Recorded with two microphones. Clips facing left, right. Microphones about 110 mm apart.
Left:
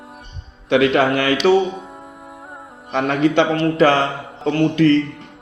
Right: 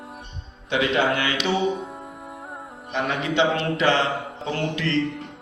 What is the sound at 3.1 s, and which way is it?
A man's voice, 45° left (ahead or behind).